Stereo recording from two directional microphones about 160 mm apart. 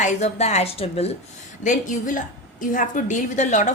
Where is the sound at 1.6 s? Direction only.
55° left (ahead or behind).